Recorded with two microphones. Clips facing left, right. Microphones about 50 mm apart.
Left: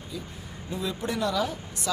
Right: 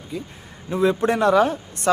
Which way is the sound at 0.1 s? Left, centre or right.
Right.